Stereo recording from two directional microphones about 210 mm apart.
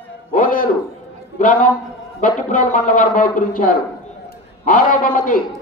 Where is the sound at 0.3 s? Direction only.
40° left (ahead or behind).